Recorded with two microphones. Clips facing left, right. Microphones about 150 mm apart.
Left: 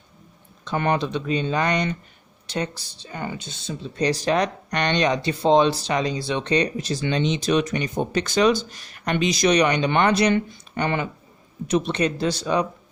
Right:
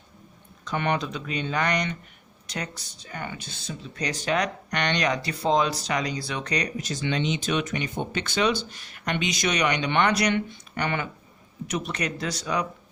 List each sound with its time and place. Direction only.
0.6 s speech: 35° left (ahead or behind)